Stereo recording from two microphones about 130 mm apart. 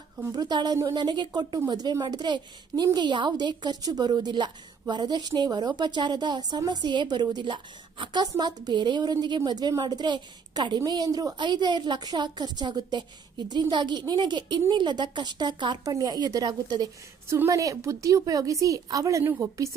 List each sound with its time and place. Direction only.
0.3 s a woman's voice: 30° right (ahead or behind)